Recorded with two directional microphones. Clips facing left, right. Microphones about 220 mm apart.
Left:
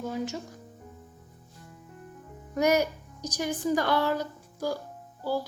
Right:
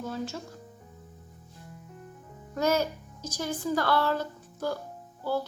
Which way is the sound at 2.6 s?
15° left (ahead or behind).